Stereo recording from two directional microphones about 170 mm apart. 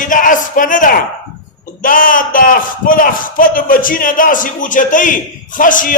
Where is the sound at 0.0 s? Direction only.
50° left (ahead or behind).